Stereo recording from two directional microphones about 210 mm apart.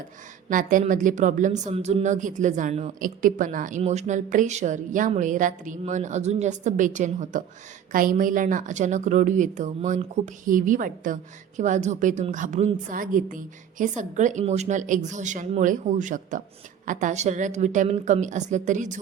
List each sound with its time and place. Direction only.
0.5 s a woman's voice: 40° right (ahead or behind)